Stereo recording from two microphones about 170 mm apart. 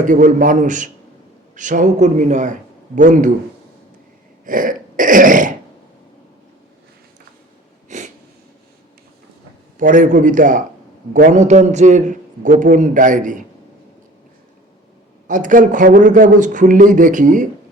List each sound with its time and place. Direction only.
0.0 s a man's voice: 50° right (ahead or behind)
4.4 s throat clearing: 50° right (ahead or behind)
7.9 s a sound: 45° right (ahead or behind)
9.7 s a man's voice: 50° right (ahead or behind)
15.3 s a man's voice: 50° right (ahead or behind)